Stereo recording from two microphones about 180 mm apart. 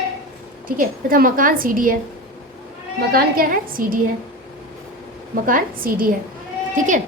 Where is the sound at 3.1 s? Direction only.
50° right (ahead or behind).